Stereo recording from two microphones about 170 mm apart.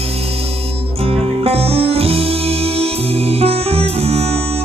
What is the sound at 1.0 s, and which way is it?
Music, 35° right (ahead or behind).